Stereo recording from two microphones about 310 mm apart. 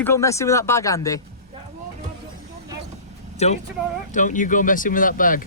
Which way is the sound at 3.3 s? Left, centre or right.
Left.